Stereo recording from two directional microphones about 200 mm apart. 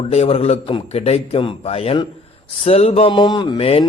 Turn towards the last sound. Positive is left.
turn(degrees=30)  # may be behind; listen again after turning